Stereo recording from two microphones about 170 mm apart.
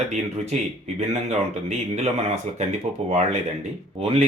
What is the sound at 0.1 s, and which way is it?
Speech, 40° right (ahead or behind).